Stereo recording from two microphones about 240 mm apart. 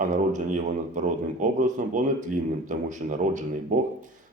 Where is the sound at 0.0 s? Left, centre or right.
Right.